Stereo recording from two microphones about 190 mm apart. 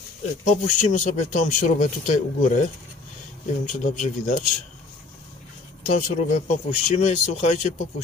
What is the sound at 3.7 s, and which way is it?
Speech, 40° left (ahead or behind).